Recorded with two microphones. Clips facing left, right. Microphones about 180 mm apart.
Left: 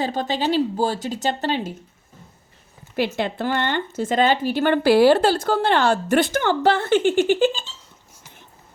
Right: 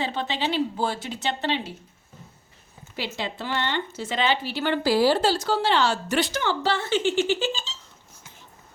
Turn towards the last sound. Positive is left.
turn(degrees=55)  # may be behind; listen again after turning